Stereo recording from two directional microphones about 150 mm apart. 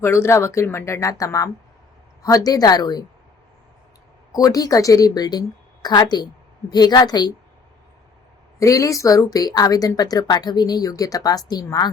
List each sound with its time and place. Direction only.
0.0 s speech: 15° left (ahead or behind)
4.3 s speech: 25° left (ahead or behind)
8.5 s speech: 20° left (ahead or behind)